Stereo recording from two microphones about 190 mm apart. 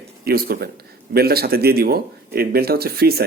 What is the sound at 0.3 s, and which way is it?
Speech, 50° right (ahead or behind).